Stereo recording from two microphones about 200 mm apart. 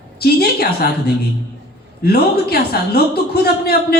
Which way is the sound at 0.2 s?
50° left (ahead or behind).